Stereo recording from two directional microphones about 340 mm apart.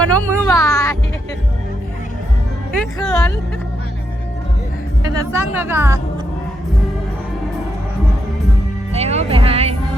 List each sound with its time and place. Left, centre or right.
0.0 s speech: right
0.4 s music: centre
2.7 s speech: centre
5.2 s a woman's voice: centre
8.9 s speech: centre